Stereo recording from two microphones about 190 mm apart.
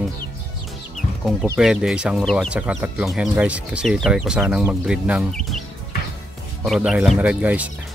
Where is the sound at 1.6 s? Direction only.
5° right (ahead or behind).